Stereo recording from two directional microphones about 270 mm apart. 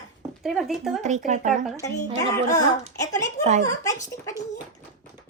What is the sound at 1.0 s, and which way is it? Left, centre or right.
Speech, right.